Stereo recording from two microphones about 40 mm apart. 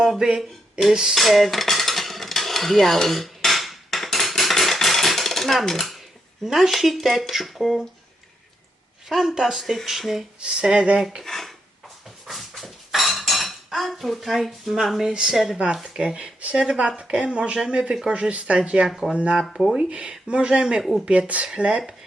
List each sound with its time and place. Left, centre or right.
0.2 s speech: centre
1.1 s cutlery: centre
6.4 s speech: centre
9.0 s speech: centre
10.4 s speech: right
11.2 s dishes: centre
13.7 s speech: centre
15.1 s speech: right
18.9 s speech: centre
19.1 s speech: right
19.7 s speech: centre
20.0 s speech: right
21.0 s speech: right
21.4 s speech: right